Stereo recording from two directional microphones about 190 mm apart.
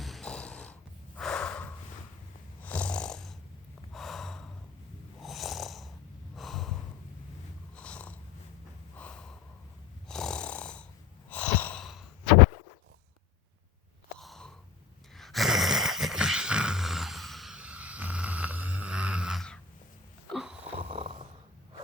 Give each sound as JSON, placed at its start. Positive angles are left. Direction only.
{"t": 0.0, "sound": "snort", "side_deg": 0}
{"t": 2.6, "sound": "snoring", "side_deg": 10}
{"t": 3.9, "sound": "gasp", "side_deg": 0}
{"t": 5.2, "sound": "snoring", "side_deg": 0}
{"t": 6.3, "sound": "gasp", "side_deg": 0}
{"t": 7.8, "sound": "purr", "side_deg": 5}
{"t": 9.0, "sound": "snort", "side_deg": 5}
{"t": 10.1, "sound": "snoring", "side_deg": 5}
{"t": 11.3, "sound": "a sound", "side_deg": 10}
{"t": 14.2, "sound": "a sound", "side_deg": 0}
{"t": 20.7, "sound": "snoring", "side_deg": -25}